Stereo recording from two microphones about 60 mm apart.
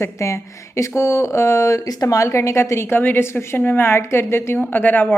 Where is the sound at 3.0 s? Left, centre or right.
Left.